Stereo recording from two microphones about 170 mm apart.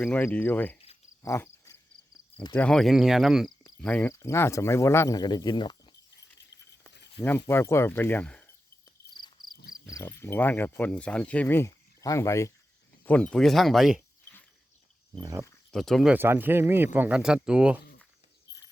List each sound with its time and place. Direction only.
0.0 s speech: 15° left (ahead or behind)
1.2 s cricket: 15° left (ahead or behind)
2.3 s speech: 25° left (ahead or behind)
2.6 s speech: 5° left (ahead or behind)
3.8 s speech: 10° left (ahead or behind); by 5.9 s 25° left (ahead or behind)
7.2 s speech: 15° left (ahead or behind)
9.9 s speech: 15° left (ahead or behind); by 14.0 s centre (ahead or behind)
15.1 s speech: 20° right (ahead or behind)
15.7 s speech: centre (ahead or behind)
16.1 s speech: 10° right (ahead or behind)